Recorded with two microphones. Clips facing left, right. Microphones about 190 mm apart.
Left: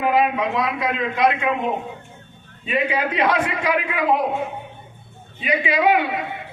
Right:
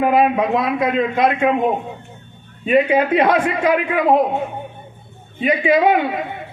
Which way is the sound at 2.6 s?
50° right (ahead or behind).